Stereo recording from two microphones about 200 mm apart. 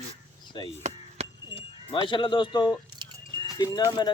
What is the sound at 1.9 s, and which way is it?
Speech, 25° left (ahead or behind).